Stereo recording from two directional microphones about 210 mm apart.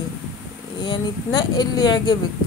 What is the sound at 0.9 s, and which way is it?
A woman's voice, 20° left (ahead or behind).